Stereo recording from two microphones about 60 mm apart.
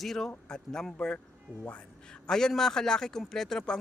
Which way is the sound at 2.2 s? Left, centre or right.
Centre.